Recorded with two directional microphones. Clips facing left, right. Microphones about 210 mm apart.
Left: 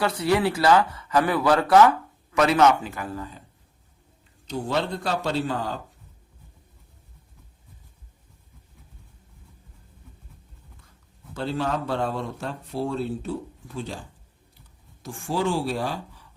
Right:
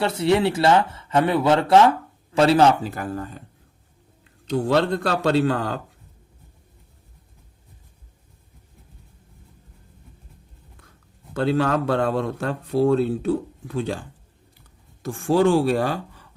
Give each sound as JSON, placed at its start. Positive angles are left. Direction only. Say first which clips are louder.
{"t": 0.0, "sound": "a man's voice", "louder": "right 3 dB", "side_deg": -25}
{"t": 4.4, "sound": "speech", "louder": "right 7 dB", "side_deg": -65}
{"t": 11.3, "sound": "speech", "louder": "right 6 dB", "side_deg": -65}
{"t": 15.0, "sound": "speech", "louder": "right 8 dB", "side_deg": -60}